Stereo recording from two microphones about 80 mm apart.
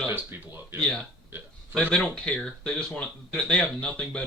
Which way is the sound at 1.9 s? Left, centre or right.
Centre.